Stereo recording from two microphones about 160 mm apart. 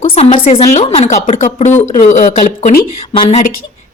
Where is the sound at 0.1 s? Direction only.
40° left (ahead or behind).